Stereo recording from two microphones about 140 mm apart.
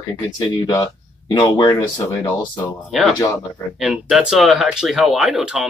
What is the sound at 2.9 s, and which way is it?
Speech, centre (ahead or behind).